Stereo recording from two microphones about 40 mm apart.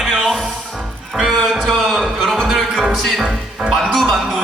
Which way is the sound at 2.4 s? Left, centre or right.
Centre.